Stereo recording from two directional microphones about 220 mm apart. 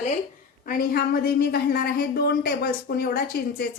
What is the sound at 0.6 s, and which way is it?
A woman's voice, 45° left (ahead or behind).